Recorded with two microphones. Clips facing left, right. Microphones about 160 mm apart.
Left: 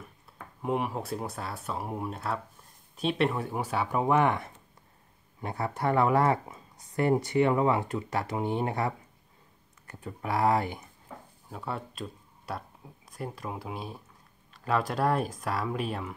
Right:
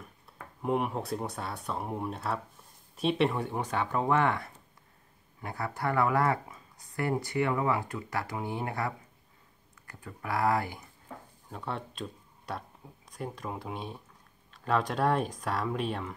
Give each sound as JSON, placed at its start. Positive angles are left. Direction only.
{"t": 0.6, "sound": "speech", "side_deg": 0}
{"t": 11.4, "sound": "speech", "side_deg": 5}